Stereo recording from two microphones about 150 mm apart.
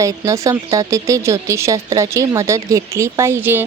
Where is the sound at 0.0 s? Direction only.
20° right (ahead or behind).